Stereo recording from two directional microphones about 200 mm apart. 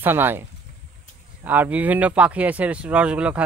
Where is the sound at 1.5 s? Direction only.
10° right (ahead or behind).